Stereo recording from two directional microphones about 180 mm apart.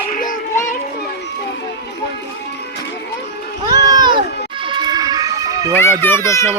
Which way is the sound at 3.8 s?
20° right (ahead or behind).